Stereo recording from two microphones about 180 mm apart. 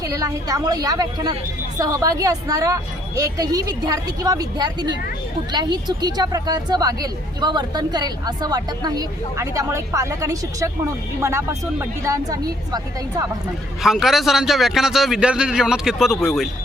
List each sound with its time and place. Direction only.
0.0 s a woman's voice: 20° right (ahead or behind)
13.8 s a man's voice: centre (ahead or behind)